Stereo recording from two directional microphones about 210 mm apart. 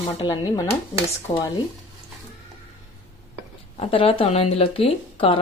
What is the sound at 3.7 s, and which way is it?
Speech, 30° left (ahead or behind).